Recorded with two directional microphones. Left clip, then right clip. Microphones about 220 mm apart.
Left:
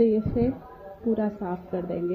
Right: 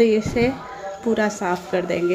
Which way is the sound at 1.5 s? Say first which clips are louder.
Right 9 dB; 5° right (ahead or behind).